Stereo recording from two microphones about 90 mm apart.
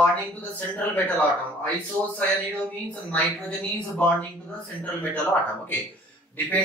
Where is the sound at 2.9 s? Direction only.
15° left (ahead or behind).